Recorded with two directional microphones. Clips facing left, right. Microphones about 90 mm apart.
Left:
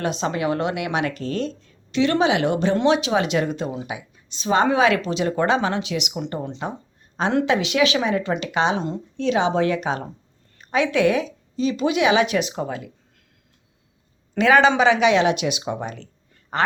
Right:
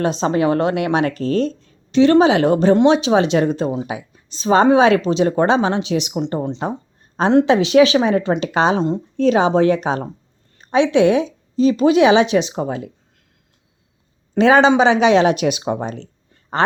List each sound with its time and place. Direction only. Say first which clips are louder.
0.0 s speech: right 6 dB; 35° right (ahead or behind)
14.3 s speech: right 4 dB; 30° right (ahead or behind)